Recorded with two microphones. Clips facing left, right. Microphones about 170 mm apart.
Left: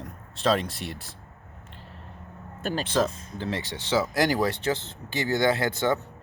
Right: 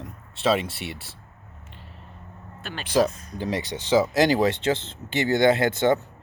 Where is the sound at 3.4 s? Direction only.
15° right (ahead or behind).